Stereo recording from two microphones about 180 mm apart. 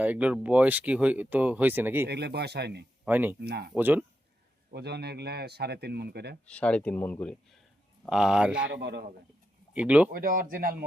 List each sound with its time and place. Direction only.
0.0 s speech: 5° right (ahead or behind)
2.0 s a man's voice: 65° right (ahead or behind)
3.0 s speech: 10° right (ahead or behind)
3.4 s a man's voice: 65° right (ahead or behind)
3.8 s speech: 10° right (ahead or behind)
4.7 s a man's voice: 65° right (ahead or behind)
6.5 s speech: 5° left (ahead or behind)
8.0 s speech: 5° right (ahead or behind)
8.5 s a man's voice: 75° right (ahead or behind)
9.7 s speech: 5° right (ahead or behind)
10.1 s speech: 50° right (ahead or behind)